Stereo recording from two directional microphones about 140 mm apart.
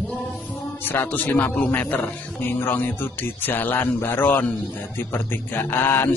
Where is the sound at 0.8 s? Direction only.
15° left (ahead or behind).